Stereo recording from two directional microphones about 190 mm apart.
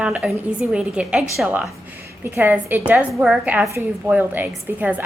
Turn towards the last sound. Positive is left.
turn(degrees=-10)  # may be behind; listen again after turning